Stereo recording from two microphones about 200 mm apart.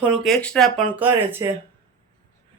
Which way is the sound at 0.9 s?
10° right (ahead or behind).